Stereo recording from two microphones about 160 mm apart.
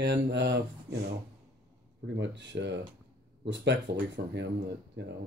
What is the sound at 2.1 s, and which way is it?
Speech, 90° right.